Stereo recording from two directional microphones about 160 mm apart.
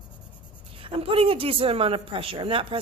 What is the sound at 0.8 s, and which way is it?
Speech, 35° right (ahead or behind).